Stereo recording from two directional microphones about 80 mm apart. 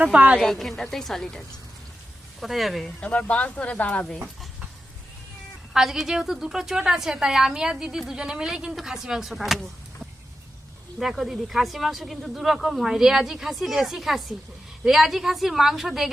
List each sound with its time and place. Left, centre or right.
0.0 s a woman's voice: centre
0.3 s a woman's voice: centre
2.4 s a woman's voice: centre
3.0 s speech: centre
5.7 s a woman's voice: centre
11.0 s a woman's voice: centre